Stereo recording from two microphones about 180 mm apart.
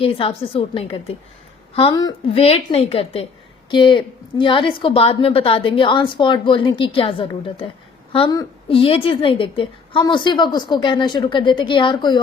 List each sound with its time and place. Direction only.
0.0 s a woman's voice: 30° left (ahead or behind)